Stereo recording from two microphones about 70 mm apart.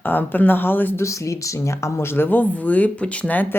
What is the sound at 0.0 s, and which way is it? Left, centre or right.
A woman's voice, left.